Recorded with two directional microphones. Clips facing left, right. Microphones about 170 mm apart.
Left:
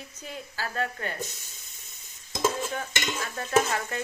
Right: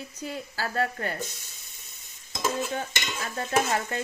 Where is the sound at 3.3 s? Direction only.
30° right (ahead or behind).